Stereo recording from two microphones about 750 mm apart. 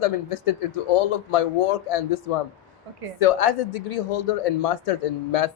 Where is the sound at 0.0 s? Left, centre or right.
Left.